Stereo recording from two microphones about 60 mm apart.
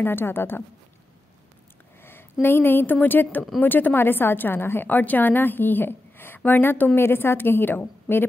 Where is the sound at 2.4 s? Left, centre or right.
Left.